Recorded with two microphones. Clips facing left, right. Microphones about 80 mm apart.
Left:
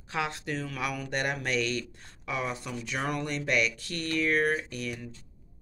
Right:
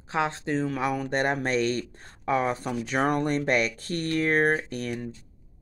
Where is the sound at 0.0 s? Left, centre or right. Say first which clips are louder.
Right 5 dB; right.